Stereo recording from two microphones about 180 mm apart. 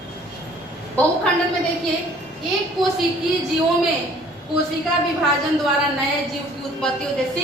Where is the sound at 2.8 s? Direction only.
Centre (ahead or behind).